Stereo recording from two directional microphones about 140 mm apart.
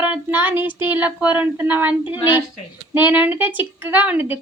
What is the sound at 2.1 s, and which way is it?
Speech, 35° left (ahead or behind).